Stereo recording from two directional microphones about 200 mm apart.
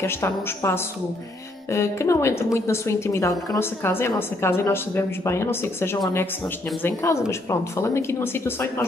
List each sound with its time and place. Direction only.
0.0 s a woman's voice: 15° left (ahead or behind)